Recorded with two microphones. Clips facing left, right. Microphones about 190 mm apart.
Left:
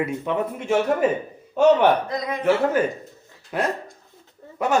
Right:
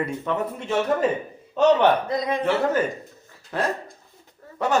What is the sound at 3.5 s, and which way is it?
Speech, 15° left (ahead or behind).